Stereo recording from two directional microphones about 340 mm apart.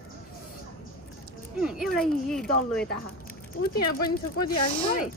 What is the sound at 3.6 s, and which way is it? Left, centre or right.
Speech, left.